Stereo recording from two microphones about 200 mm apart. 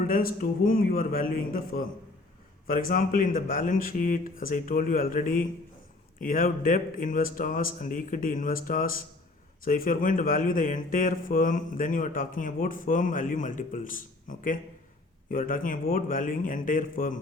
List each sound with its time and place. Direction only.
0.0 s a man's voice: 45° left (ahead or behind)